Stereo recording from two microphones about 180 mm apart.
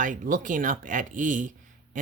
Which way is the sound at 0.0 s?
45° right (ahead or behind).